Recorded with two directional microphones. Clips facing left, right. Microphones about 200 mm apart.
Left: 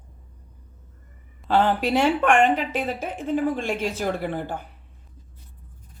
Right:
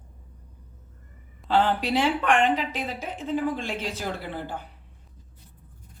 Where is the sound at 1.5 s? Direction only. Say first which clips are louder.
Left 2 dB; 45° left (ahead or behind).